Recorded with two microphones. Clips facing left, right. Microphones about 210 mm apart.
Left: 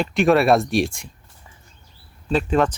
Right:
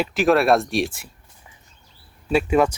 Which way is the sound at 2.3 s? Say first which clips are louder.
Right 1 dB; 10° right (ahead or behind).